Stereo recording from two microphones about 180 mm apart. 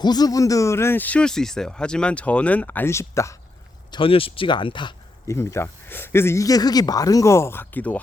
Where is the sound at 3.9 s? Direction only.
30° left (ahead or behind).